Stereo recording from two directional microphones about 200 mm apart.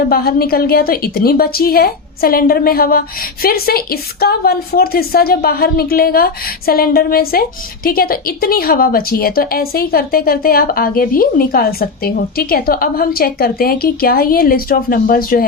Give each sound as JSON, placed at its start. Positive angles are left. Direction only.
{"t": 0.1, "sound": "a woman's voice", "side_deg": 50}